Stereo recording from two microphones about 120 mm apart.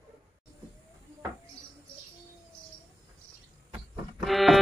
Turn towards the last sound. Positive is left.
turn(degrees=0)  # may be behind; listen again after turning